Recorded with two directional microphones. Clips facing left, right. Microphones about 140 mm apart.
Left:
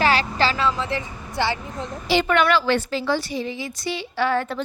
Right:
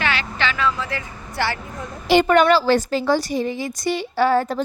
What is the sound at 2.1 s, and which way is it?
A woman's voice, 45° right (ahead or behind).